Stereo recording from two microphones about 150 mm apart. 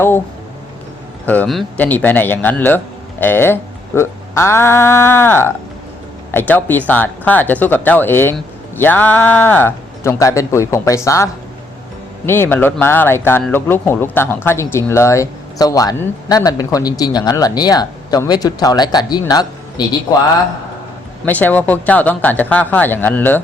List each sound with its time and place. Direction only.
1.2 s speech: 10° left (ahead or behind)
1.5 s speech: centre (ahead or behind)
1.8 s speech: 10° left (ahead or behind); by 20.0 s 25° left (ahead or behind)
21.2 s speech: 10° left (ahead or behind)